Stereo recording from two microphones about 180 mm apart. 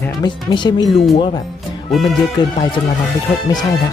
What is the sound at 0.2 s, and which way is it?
Speech, 25° left (ahead or behind).